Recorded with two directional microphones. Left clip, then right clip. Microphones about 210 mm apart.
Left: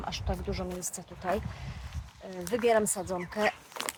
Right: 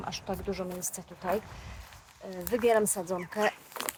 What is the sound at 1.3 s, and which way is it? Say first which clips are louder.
Speech: even; 15° right (ahead or behind).